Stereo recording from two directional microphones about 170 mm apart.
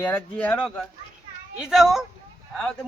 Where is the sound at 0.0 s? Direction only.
10° left (ahead or behind).